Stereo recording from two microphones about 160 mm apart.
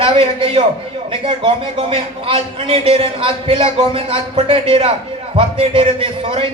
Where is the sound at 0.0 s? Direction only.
35° right (ahead or behind).